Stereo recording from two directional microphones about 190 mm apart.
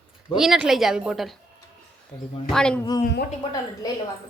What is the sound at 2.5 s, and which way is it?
Speech, 5° left (ahead or behind).